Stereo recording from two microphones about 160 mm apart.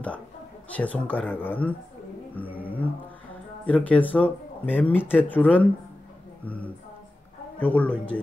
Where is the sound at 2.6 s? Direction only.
10° left (ahead or behind).